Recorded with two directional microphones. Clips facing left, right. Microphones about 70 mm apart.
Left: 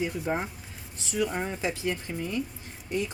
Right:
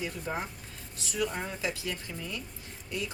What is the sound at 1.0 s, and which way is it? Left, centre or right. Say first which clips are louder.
Speech: left 4 dB; left.